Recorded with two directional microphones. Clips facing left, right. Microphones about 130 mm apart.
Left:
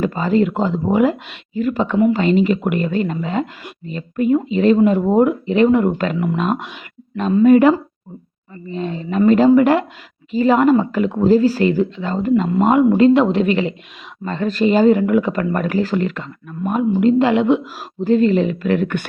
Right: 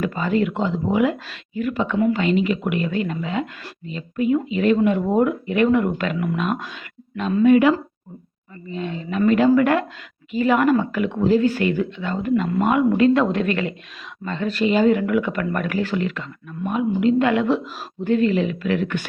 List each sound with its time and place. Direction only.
0.0 s a woman's voice: 35° left (ahead or behind)
7.2 s a woman's voice: 35° left (ahead or behind)
14.3 s speech: 40° left (ahead or behind); by 17.6 s 25° left (ahead or behind)
17.6 s speech: 10° left (ahead or behind)
18.0 s speech: 35° left (ahead or behind)